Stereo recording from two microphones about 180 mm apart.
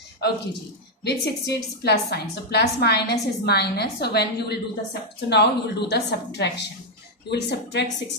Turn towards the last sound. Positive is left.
turn(degrees=70)  # may be behind; listen again after turning